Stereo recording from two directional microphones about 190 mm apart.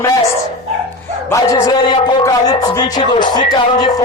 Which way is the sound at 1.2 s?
15° left (ahead or behind).